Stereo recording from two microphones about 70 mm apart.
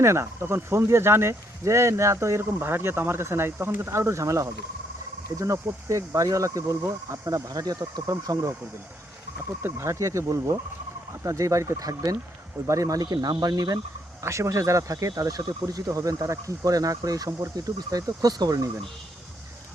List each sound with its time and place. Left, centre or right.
0.0 s speech: right
9.6 s speech: right
14.2 s speech: right
17.7 s speech: right